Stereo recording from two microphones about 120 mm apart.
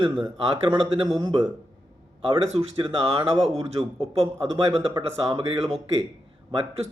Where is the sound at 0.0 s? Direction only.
45° right (ahead or behind).